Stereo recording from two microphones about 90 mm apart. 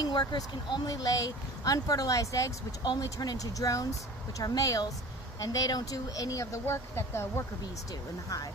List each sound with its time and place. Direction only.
0.0 s speech: 50° left (ahead or behind)
0.8 s speech: 40° left (ahead or behind)